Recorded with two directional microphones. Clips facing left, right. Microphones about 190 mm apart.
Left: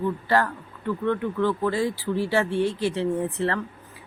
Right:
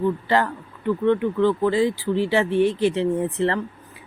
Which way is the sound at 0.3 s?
20° right (ahead or behind).